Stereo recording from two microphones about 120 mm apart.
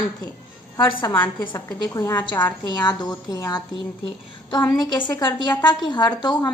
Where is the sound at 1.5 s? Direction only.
30° left (ahead or behind).